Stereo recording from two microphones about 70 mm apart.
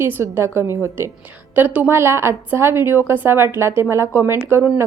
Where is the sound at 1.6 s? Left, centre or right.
Right.